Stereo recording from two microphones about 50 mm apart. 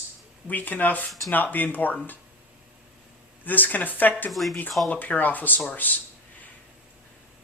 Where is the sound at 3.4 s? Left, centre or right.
Left.